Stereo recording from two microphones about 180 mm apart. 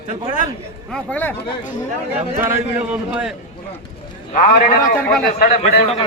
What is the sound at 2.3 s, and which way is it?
A man's voice, 10° right (ahead or behind).